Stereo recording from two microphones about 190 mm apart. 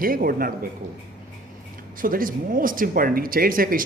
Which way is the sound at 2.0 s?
45° right (ahead or behind).